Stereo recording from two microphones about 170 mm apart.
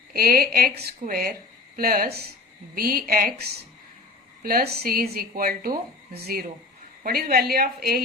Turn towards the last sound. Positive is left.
turn(degrees=-65)  # may be behind; listen again after turning